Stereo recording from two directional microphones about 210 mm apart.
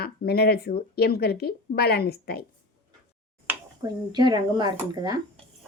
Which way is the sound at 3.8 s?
20° right (ahead or behind).